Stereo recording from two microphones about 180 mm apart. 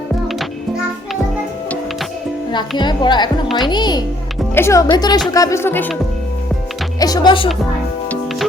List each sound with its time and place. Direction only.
2.5 s speech: 25° left (ahead or behind)
5.3 s music: 20° left (ahead or behind)
7.0 s speech: 20° left (ahead or behind)